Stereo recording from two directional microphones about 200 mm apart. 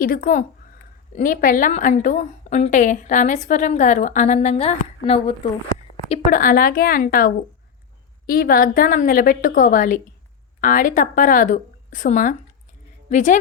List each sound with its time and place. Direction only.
0.0 s a woman's voice: 45° left (ahead or behind); by 5.5 s 30° left (ahead or behind)
6.3 s a woman's voice: 45° left (ahead or behind)